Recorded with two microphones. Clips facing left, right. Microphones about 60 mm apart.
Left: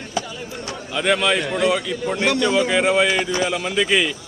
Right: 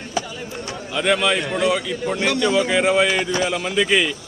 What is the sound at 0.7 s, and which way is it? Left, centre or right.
A man's voice, centre.